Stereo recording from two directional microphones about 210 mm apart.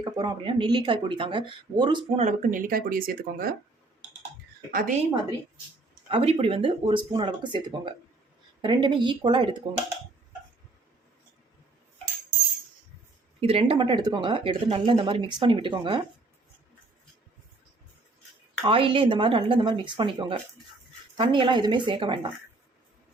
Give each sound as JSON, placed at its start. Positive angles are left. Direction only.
{"t": 0.0, "sound": "speech", "side_deg": -20}
{"t": 2.2, "sound": "speech", "side_deg": -40}
{"t": 4.7, "sound": "a woman's voice", "side_deg": -45}
{"t": 6.1, "sound": "speech", "side_deg": -25}
{"t": 13.4, "sound": "speech", "side_deg": -25}
{"t": 18.6, "sound": "speech", "side_deg": -25}